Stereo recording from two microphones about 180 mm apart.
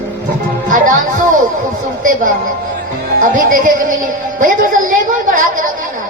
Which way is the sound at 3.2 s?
45° right (ahead or behind).